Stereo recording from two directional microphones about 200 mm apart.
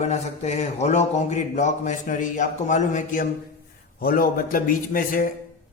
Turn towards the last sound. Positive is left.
turn(degrees=45)  # may be behind; listen again after turning